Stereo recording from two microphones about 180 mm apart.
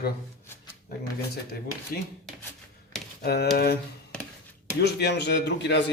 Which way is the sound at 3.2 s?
65° left (ahead or behind).